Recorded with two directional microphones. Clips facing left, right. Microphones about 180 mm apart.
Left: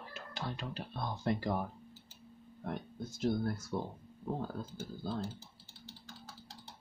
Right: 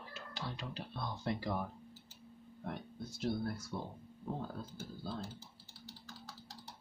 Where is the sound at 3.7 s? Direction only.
35° left (ahead or behind).